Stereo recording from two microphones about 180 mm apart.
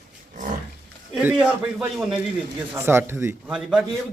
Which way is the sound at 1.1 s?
10° right (ahead or behind).